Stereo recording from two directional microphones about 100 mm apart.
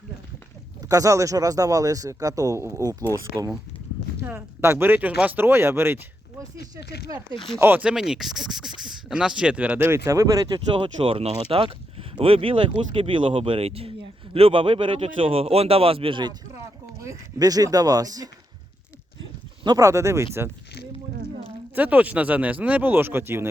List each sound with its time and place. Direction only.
0.8 s speech: 35° right (ahead or behind)
4.2 s speech: 20° right (ahead or behind)
7.3 s speech: 5° left (ahead or behind)
7.6 s speech: 20° right (ahead or behind)
7.9 s speech: 5° right (ahead or behind); by 10.2 s 25° right (ahead or behind)
10.5 s speech: 60° right (ahead or behind); by 13.9 s 80° right
14.3 s speech: 65° right (ahead or behind)
17.0 s speech: 35° right (ahead or behind)
19.6 s speech: 35° right (ahead or behind)
21.8 s speech: 15° right (ahead or behind)